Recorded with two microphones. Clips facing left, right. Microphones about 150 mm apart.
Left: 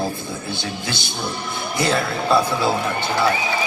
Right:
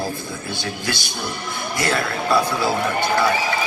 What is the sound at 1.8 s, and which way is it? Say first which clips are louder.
Speech: left 2 dB; 25° left (ahead or behind).